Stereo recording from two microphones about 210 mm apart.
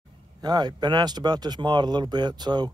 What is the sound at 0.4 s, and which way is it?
Speech, 20° right (ahead or behind).